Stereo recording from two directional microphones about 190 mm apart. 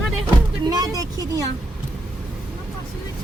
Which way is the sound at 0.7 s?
20° right (ahead or behind).